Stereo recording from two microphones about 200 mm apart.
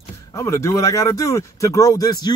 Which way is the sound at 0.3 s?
15° left (ahead or behind).